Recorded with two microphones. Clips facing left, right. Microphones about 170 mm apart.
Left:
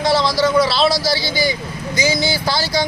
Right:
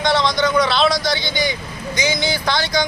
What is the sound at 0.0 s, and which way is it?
Speech, 5° left (ahead or behind).